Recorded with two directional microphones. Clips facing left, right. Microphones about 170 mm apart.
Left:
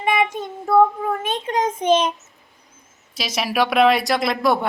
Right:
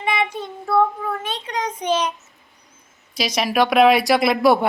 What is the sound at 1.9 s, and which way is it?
Speech, 25° left (ahead or behind).